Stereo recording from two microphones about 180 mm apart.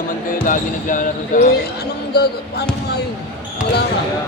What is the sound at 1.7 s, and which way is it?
Speech, 65° left (ahead or behind).